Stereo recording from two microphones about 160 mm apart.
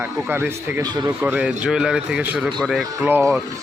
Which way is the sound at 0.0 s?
15° right (ahead or behind).